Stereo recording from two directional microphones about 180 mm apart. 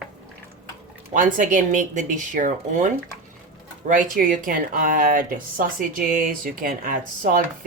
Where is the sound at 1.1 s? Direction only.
45° right (ahead or behind).